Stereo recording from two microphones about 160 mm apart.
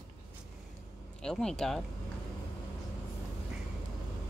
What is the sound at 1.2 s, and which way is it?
Speech, 5° left (ahead or behind).